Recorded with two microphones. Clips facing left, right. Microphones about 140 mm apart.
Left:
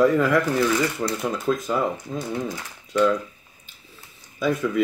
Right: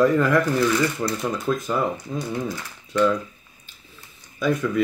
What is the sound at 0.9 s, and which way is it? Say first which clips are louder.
Speech: even; centre (ahead or behind).